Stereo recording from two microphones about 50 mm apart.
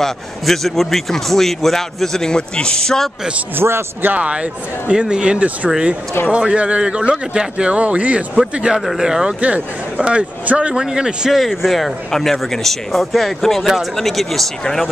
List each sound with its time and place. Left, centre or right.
0.0 s a man's voice: centre
3.5 s a man's voice: right
4.0 s speech: right
4.3 s a man's voice: right
9.4 s a man's voice: right
10.8 s a man's voice: centre
11.3 s speech: centre